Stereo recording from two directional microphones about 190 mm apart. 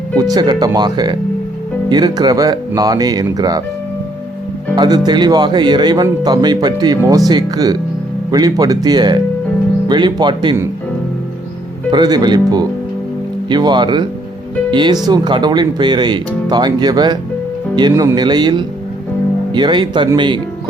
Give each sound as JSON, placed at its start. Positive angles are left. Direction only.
{"t": 0.2, "sound": "speech", "side_deg": -20}
{"t": 4.7, "sound": "speech", "side_deg": -20}
{"t": 11.9, "sound": "speech", "side_deg": -20}